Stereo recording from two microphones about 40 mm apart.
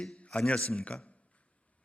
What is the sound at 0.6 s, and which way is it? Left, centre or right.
Speech, left.